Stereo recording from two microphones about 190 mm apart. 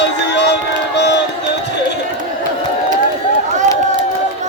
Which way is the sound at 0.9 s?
65° left (ahead or behind).